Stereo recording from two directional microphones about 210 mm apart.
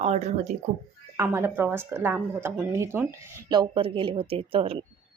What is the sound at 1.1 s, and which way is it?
Speech, 10° right (ahead or behind).